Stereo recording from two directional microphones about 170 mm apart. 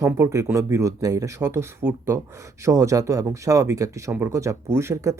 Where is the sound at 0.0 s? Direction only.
20° right (ahead or behind).